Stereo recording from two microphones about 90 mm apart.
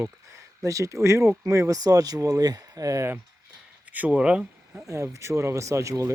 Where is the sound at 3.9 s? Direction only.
15° right (ahead or behind).